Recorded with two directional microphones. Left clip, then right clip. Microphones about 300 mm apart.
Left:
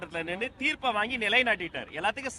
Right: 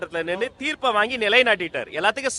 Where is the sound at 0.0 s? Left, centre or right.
Centre.